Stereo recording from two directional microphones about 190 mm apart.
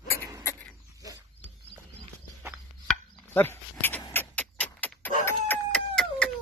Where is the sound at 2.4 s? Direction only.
Centre (ahead or behind).